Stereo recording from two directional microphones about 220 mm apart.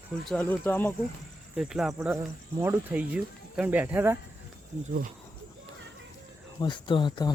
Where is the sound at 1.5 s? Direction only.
5° right (ahead or behind).